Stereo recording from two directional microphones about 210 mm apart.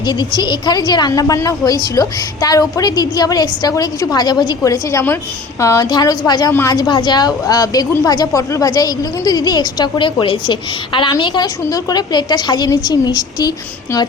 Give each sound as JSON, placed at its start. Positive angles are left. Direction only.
{"t": 0.0, "sound": "a woman's voice", "side_deg": 20}